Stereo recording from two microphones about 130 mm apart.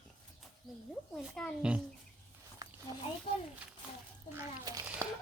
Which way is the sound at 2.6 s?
30° right (ahead or behind).